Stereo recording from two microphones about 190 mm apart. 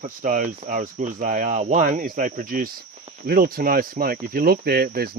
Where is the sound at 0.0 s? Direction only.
45° right (ahead or behind).